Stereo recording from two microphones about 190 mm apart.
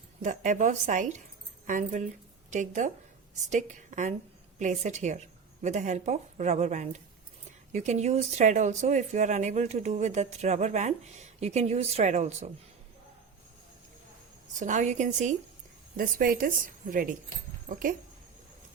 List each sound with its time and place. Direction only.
0.2 s a woman's voice: 40° right (ahead or behind)
14.6 s a woman's voice: 40° right (ahead or behind)